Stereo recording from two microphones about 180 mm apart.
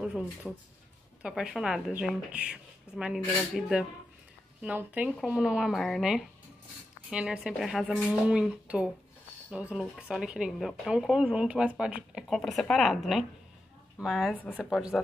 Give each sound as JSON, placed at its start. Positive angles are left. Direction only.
{"t": 0.5, "sound": "speech", "side_deg": 0}